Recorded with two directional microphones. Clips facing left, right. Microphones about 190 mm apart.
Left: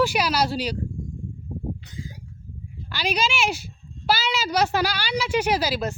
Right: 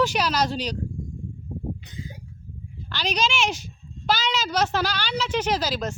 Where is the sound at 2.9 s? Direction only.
10° left (ahead or behind).